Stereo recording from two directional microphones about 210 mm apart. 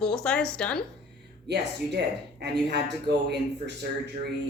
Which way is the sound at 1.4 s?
50° right (ahead or behind).